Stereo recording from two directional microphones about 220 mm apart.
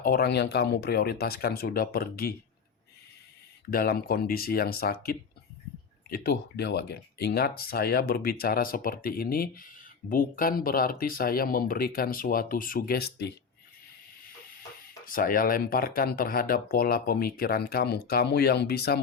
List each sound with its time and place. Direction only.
0.0 s speech: 45° left (ahead or behind)
3.7 s speech: 45° left (ahead or behind)
15.0 s speech: 40° left (ahead or behind)